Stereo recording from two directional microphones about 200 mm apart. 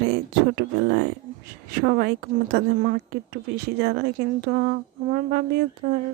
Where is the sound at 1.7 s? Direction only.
50° right (ahead or behind).